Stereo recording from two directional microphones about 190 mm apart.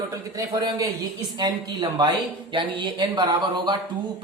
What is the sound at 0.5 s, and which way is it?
Speech, 20° right (ahead or behind).